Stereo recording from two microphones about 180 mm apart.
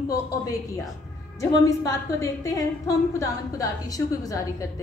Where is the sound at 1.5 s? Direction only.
20° left (ahead or behind).